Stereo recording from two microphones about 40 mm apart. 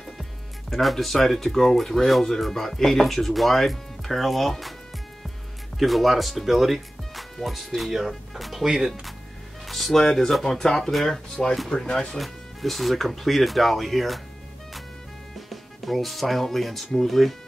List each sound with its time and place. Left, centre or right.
0.7 s speech: centre
5.8 s speech: centre
9.7 s speech: centre
11.4 s speech: left
12.2 s speech: centre
15.5 s speech: centre